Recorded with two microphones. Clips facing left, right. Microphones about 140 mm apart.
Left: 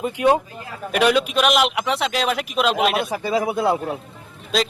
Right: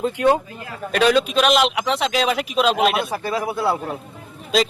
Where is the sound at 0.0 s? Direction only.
20° left (ahead or behind); by 3.1 s centre (ahead or behind).